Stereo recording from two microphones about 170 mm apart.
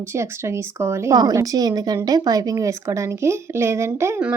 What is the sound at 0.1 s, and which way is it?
Speech, 15° right (ahead or behind).